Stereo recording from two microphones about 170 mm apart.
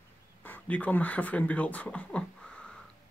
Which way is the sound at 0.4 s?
10° left (ahead or behind).